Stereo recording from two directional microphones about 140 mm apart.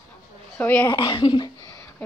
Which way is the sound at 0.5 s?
10° left (ahead or behind).